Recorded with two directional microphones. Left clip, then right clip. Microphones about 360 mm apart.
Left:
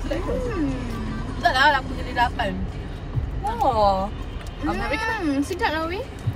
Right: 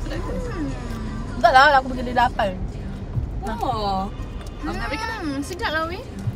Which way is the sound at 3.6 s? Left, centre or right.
Centre.